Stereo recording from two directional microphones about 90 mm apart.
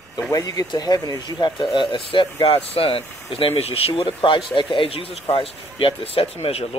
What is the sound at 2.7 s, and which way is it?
Speech, 90° left.